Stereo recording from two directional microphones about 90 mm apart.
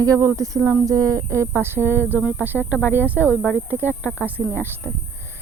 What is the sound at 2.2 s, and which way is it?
Speech, 15° right (ahead or behind).